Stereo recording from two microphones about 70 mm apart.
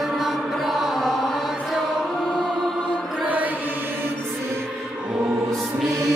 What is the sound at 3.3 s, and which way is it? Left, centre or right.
Mantra, right.